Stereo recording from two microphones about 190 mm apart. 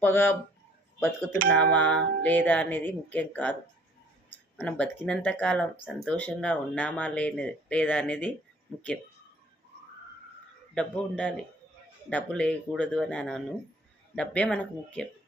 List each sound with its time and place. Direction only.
0.0 s speech: 10° left (ahead or behind)
4.5 s speech: 5° left (ahead or behind)
10.8 s speech: 5° left (ahead or behind)